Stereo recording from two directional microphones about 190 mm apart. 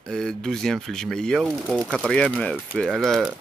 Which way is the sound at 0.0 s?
5° left (ahead or behind).